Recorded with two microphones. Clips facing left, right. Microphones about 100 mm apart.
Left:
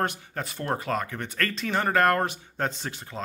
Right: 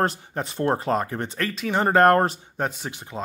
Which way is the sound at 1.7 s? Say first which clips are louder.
Right 6 dB; 30° right (ahead or behind).